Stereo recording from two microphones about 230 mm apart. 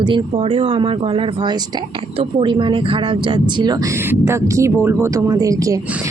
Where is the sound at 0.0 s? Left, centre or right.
Right.